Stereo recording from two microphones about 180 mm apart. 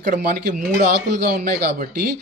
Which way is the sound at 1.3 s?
55° right (ahead or behind).